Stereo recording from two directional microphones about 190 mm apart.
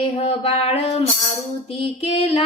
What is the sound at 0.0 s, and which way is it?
Female singing, 30° left (ahead or behind).